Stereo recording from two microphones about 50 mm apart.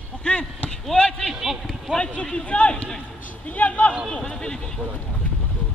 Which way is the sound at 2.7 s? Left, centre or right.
Centre.